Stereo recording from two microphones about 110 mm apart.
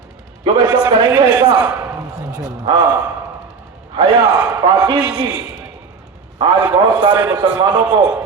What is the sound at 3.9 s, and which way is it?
Speech, 45° right (ahead or behind).